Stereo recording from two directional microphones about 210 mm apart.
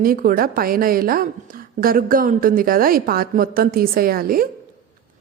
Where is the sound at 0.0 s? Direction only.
40° right (ahead or behind).